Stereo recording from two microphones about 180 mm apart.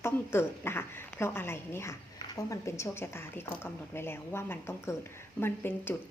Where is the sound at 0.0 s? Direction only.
15° left (ahead or behind).